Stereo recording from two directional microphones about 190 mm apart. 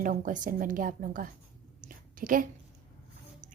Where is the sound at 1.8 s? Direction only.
45° right (ahead or behind).